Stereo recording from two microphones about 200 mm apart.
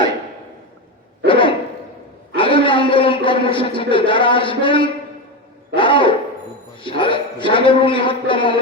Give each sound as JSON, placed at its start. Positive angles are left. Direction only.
{"t": 1.3, "sound": "a sound", "side_deg": 25}
{"t": 5.7, "sound": "owl", "side_deg": 25}
{"t": 6.7, "sound": "a man's voice", "side_deg": 25}